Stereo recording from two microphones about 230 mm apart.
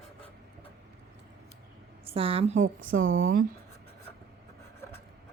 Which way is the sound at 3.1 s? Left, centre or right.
Right.